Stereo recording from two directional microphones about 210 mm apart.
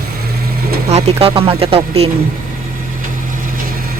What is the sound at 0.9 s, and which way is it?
Speech, 30° right (ahead or behind).